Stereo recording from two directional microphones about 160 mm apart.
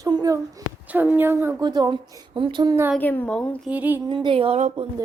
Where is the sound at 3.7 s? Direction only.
10° right (ahead or behind).